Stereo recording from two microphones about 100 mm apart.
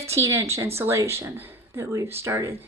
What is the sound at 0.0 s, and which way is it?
A woman's voice, 30° right (ahead or behind).